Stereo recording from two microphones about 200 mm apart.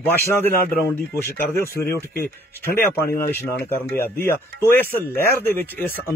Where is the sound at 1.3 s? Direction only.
10° left (ahead or behind).